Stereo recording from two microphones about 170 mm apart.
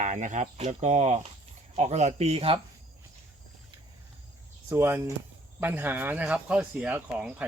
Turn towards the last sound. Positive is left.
turn(degrees=-10)  # may be behind; listen again after turning